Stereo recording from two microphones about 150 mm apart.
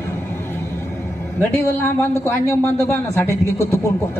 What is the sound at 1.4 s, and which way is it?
A man's voice, 15° left (ahead or behind).